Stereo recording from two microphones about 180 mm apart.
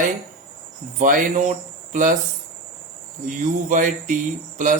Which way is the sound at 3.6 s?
45° right (ahead or behind).